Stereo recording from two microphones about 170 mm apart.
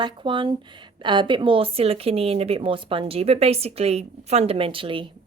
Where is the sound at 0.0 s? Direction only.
30° right (ahead or behind).